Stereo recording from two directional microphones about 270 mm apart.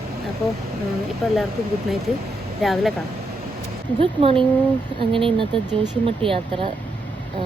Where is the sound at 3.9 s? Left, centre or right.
Centre.